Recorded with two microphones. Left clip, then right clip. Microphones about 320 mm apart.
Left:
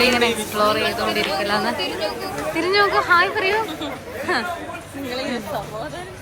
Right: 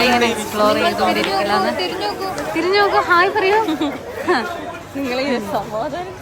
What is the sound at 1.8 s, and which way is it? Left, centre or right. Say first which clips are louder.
Speech: right 3 dB; right.